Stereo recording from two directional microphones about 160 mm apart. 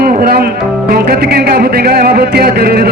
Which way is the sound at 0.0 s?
70° right (ahead or behind).